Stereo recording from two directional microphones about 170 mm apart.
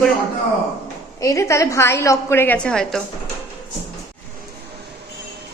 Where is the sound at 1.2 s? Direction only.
15° left (ahead or behind).